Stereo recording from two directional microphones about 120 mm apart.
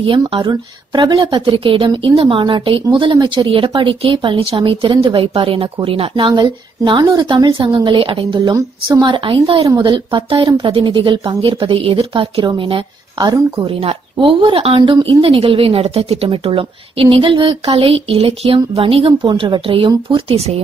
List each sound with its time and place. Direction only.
0.0 s a woman's voice: 45° right (ahead or behind); by 7.8 s 30° right (ahead or behind)
7.8 s a woman's voice: 45° right (ahead or behind)
9.0 s a woman's voice: 40° right (ahead or behind)
13.2 s a woman's voice: 35° right (ahead or behind)
13.7 s a woman's voice: 50° right (ahead or behind)
20.3 s speech: 60° right (ahead or behind)